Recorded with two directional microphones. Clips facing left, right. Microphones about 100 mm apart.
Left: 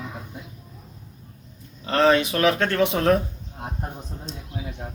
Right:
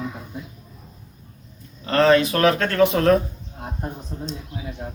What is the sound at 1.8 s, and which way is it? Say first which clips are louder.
Speech: right 2 dB; 15° left (ahead or behind).